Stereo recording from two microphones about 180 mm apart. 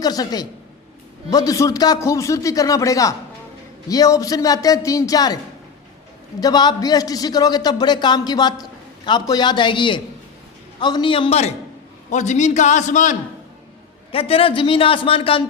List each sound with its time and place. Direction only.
0.0 s a man's voice: 20° left (ahead or behind)
6.4 s a man's voice: 20° left (ahead or behind); by 13.1 s 45° left (ahead or behind)
14.1 s a man's voice: 30° left (ahead or behind)